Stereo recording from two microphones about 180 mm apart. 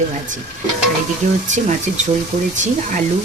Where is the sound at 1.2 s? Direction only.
40° right (ahead or behind).